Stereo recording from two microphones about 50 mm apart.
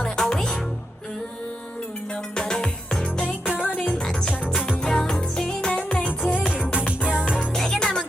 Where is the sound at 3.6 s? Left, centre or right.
Left.